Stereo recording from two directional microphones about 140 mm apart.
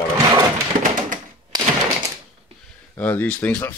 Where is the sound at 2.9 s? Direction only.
10° left (ahead or behind).